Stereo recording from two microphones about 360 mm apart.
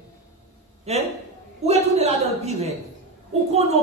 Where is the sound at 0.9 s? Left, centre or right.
Centre.